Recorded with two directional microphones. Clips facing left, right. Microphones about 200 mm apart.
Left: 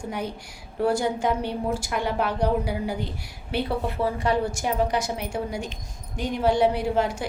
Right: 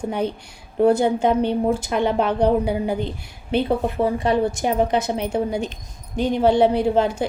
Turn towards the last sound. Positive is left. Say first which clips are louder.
# right 5 dB
turn(degrees=-25)  # may be behind; listen again after turning